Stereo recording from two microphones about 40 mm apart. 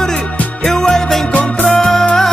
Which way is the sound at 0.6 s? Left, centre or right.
Centre.